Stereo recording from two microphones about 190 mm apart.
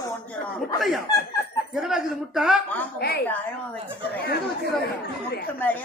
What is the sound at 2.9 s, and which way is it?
Speech, 55° left (ahead or behind).